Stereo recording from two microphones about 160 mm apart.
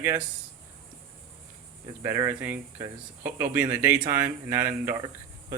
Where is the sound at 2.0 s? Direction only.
20° right (ahead or behind).